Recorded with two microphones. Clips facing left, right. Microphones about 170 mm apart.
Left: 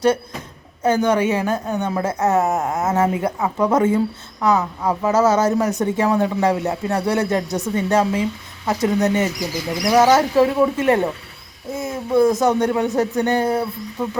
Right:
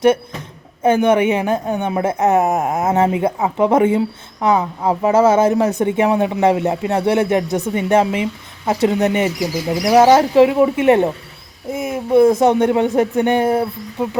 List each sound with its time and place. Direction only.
0.8 s a woman's voice: 25° right (ahead or behind)
9.8 s a woman's voice: 30° right (ahead or behind)